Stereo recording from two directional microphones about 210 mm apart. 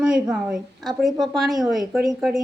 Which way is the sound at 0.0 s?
5° right (ahead or behind).